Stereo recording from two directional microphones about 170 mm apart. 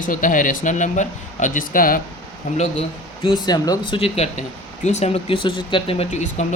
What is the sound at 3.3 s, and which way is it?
Speech, 25° left (ahead or behind).